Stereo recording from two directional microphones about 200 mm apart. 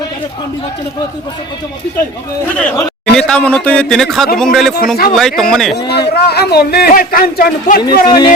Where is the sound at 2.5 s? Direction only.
5° left (ahead or behind).